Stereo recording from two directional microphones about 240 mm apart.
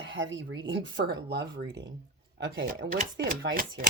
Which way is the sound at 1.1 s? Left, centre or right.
Right.